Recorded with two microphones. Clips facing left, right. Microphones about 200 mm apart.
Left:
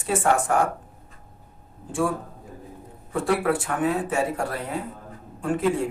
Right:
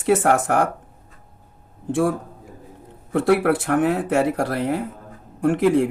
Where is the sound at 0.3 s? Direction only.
90° right.